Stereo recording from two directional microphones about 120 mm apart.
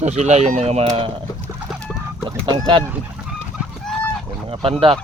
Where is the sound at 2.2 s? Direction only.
40° right (ahead or behind).